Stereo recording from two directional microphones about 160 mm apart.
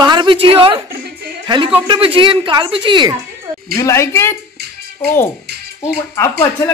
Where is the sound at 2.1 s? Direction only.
30° right (ahead or behind).